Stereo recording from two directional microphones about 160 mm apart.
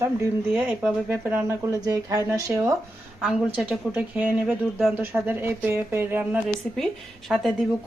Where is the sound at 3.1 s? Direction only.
5° right (ahead or behind).